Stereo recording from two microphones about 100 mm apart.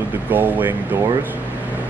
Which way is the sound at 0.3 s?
20° right (ahead or behind).